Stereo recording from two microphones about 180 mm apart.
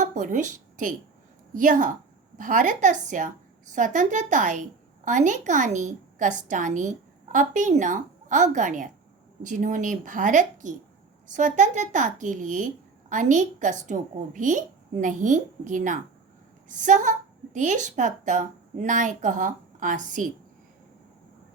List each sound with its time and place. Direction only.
0.0 s a woman's voice: 45° right (ahead or behind)